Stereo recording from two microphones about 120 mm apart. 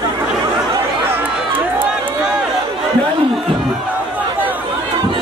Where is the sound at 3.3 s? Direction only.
Centre (ahead or behind).